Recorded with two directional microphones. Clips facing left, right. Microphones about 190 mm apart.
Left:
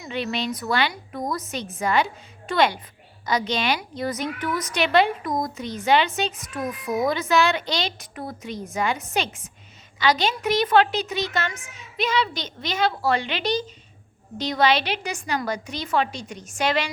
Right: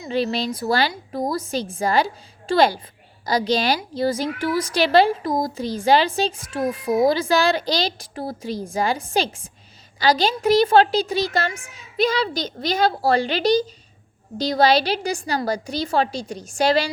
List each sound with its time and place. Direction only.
0.0 s a woman's voice: 35° right (ahead or behind)